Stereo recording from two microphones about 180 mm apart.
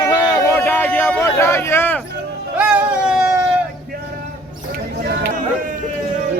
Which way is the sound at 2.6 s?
5° right (ahead or behind).